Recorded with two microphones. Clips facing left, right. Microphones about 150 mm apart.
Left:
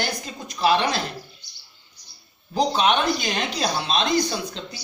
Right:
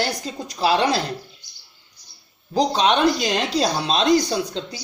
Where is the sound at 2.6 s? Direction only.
35° right (ahead or behind).